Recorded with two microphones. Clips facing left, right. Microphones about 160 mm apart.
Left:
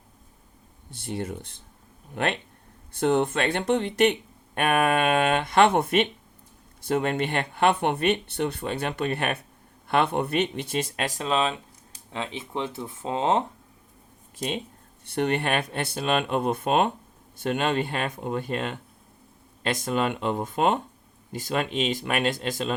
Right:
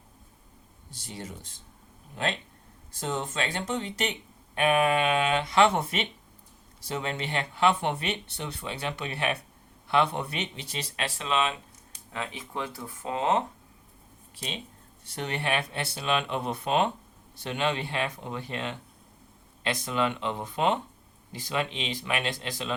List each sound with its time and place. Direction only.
0.9 s speech: 60° left (ahead or behind); by 13.4 s 30° left (ahead or behind)
14.3 s speech: 45° left (ahead or behind)
15.0 s speech: 60° left (ahead or behind)